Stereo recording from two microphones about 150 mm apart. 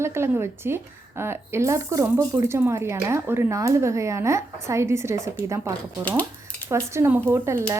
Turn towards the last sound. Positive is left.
turn(degrees=-15)  # may be behind; listen again after turning